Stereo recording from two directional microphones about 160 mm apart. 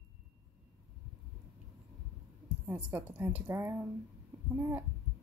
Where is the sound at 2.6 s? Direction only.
15° right (ahead or behind).